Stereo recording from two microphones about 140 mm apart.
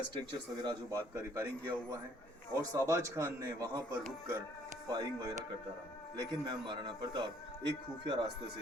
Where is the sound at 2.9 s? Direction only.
20° right (ahead or behind).